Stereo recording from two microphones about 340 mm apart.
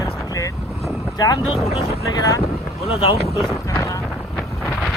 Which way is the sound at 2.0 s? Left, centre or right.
Centre.